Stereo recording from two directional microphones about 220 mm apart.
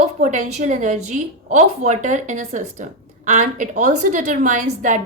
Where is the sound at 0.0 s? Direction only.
35° right (ahead or behind).